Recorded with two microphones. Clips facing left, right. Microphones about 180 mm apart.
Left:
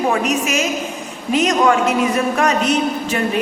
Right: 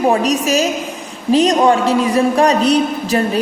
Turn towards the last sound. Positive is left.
turn(degrees=-35)  # may be behind; listen again after turning